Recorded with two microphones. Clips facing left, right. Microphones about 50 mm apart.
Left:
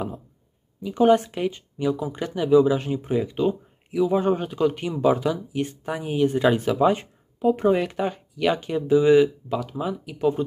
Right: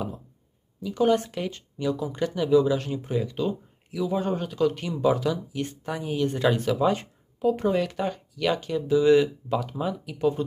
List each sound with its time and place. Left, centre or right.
0.7 s speech: left
8.9 s speech: centre